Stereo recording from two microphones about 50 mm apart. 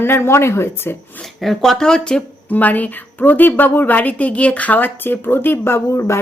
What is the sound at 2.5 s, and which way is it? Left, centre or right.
A woman's voice, left.